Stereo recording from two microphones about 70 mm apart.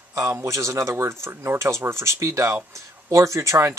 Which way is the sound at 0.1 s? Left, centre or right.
Right.